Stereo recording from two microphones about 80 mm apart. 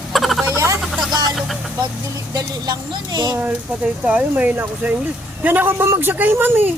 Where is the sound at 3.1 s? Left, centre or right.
Right.